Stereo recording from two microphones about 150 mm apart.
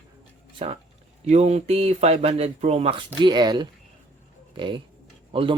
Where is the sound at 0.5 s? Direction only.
40° right (ahead or behind).